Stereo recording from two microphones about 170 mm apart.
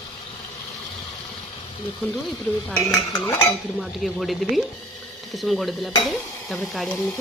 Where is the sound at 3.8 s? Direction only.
Centre (ahead or behind).